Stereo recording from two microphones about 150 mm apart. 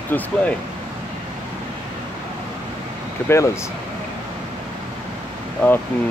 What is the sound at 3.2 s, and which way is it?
Speech, 20° left (ahead or behind).